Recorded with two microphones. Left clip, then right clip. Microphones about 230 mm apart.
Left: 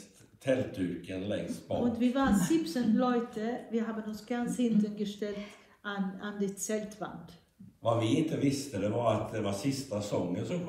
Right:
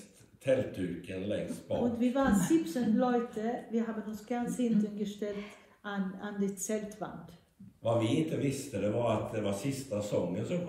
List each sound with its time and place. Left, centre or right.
0.5 s a man's voice: centre
1.9 s a woman's voice: left
7.8 s a man's voice: centre